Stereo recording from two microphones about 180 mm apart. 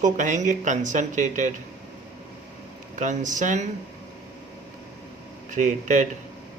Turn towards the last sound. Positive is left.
turn(degrees=-45)  # may be behind; listen again after turning